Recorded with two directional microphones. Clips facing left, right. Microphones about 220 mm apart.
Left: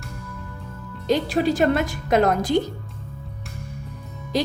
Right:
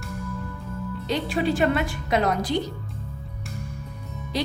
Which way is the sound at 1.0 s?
40° left (ahead or behind).